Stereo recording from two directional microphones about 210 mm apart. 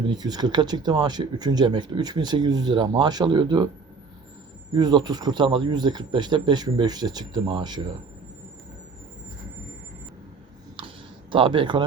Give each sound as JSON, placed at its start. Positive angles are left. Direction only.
{"t": 0.1, "sound": "speech", "side_deg": -20}
{"t": 4.7, "sound": "speech", "side_deg": -20}
{"t": 10.8, "sound": "a sound", "side_deg": -25}